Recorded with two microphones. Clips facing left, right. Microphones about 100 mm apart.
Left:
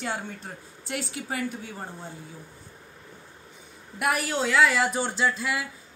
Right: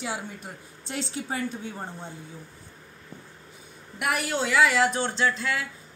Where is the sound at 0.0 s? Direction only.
5° right (ahead or behind).